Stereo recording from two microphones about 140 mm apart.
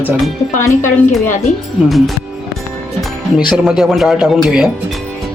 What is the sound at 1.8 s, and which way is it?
Speech, centre (ahead or behind).